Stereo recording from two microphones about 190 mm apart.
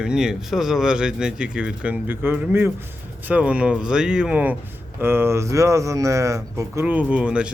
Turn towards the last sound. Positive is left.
turn(degrees=-5)  # may be behind; listen again after turning